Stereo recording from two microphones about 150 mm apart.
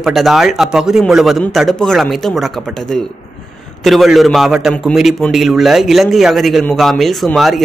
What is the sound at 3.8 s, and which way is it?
A man's voice, centre (ahead or behind).